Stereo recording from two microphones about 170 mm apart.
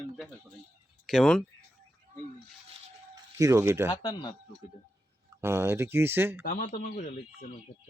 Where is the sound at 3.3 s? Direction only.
20° right (ahead or behind).